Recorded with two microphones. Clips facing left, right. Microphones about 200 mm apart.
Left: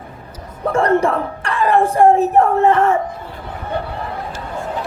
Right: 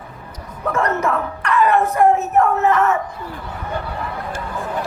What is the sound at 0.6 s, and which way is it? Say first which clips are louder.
Speech: left 5 dB; 30° left (ahead or behind).